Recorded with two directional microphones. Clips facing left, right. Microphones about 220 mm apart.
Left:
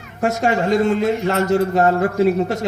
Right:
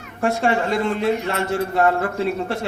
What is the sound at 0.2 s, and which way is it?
A man's voice, 40° left (ahead or behind).